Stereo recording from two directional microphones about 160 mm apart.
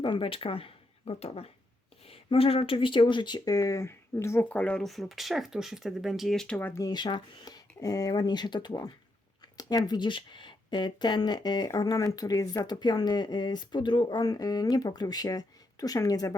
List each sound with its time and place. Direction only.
0.0 s speech: 30° left (ahead or behind)